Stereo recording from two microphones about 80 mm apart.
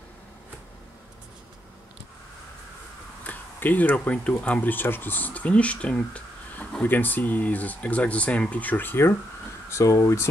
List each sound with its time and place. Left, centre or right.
3.3 s speech: left
9.7 s speech: left